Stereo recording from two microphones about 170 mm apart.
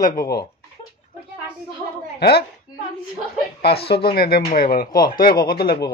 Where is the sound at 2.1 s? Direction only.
70° left (ahead or behind).